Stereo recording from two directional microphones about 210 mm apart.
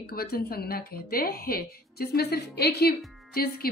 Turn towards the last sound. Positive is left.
turn(degrees=45)  # may be behind; listen again after turning